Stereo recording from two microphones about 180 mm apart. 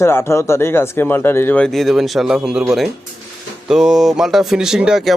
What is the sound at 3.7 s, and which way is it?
Music, centre (ahead or behind).